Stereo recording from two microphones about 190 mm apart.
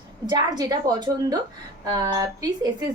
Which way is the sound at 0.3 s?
20° right (ahead or behind).